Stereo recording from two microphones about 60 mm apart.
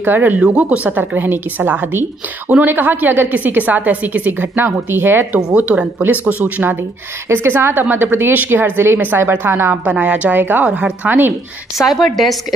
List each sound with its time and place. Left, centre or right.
0.0 s a woman's voice: right
0.4 s a woman's voice: right
5.3 s speech: right
6.4 s a woman's voice: right
9.8 s speech: right
10.3 s a woman's voice: right
11.8 s a woman's voice: centre